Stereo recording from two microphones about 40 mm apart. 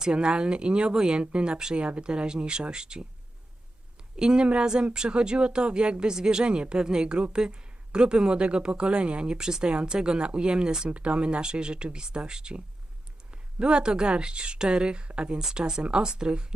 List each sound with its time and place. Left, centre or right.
0.0 s speech: centre
4.2 s a woman's voice: centre
10.8 s speech: right